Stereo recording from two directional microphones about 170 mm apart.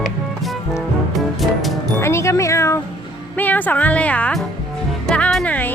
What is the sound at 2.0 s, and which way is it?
Music, 15° left (ahead or behind).